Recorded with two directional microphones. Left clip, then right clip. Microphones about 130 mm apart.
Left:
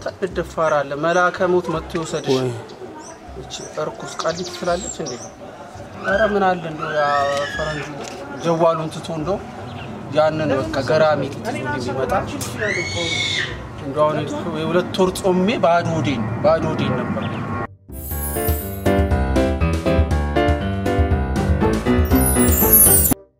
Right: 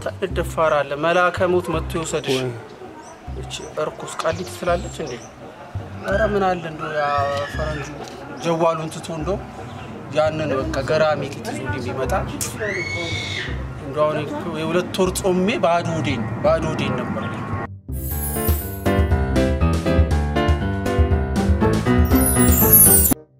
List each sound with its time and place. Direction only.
0.0 s speech: 5° right (ahead or behind)
3.7 s speech: 5° right (ahead or behind)
6.1 s speech: centre (ahead or behind)
8.4 s speech: 5° right (ahead or behind)
12.6 s speech: 40° left (ahead or behind)
13.9 s speech: centre (ahead or behind)
18.3 s music: centre (ahead or behind)